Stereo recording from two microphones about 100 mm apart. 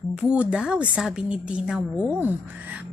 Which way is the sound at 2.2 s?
20° right (ahead or behind).